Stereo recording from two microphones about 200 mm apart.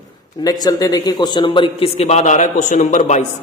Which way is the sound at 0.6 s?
20° left (ahead or behind).